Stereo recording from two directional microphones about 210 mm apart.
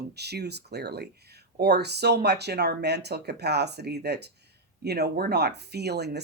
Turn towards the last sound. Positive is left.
turn(degrees=-50)  # may be behind; listen again after turning